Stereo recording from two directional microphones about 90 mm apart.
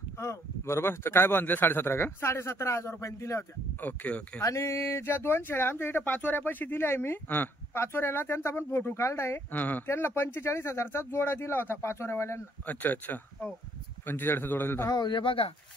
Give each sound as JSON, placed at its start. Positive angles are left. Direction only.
{"t": 0.2, "sound": "speech", "side_deg": 30}
{"t": 3.8, "sound": "speech", "side_deg": 15}
{"t": 4.4, "sound": "speech", "side_deg": 35}
{"t": 14.9, "sound": "speech", "side_deg": 55}